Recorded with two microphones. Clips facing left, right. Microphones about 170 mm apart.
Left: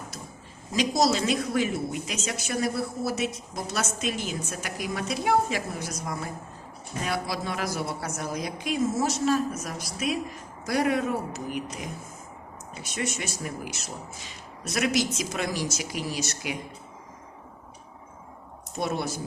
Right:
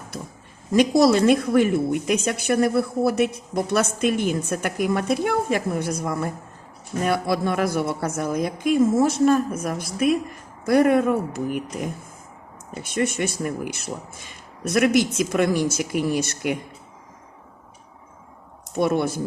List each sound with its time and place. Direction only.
0.7 s a woman's voice: 60° right (ahead or behind)
18.7 s speech: 55° right (ahead or behind)